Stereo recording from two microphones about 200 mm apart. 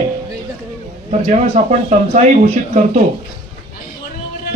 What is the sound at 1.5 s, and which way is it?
Speech, 35° right (ahead or behind).